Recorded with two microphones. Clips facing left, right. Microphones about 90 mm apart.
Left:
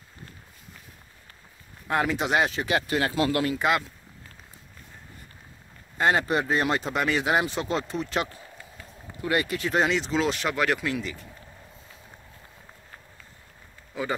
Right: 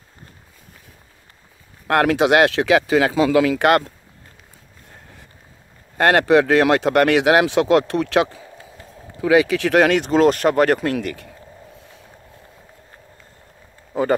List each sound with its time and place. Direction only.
1.9 s speech: 80° right; by 3.9 s 60° right (ahead or behind)
5.9 s speech: 70° right (ahead or behind)
9.3 s speech: 90° right; by 11.2 s 60° right (ahead or behind)